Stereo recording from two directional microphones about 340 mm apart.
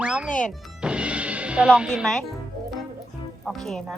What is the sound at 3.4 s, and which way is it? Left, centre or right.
Speech, centre.